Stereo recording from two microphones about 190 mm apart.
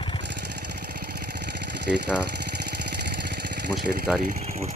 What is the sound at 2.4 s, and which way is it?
Vehicle, 60° right (ahead or behind).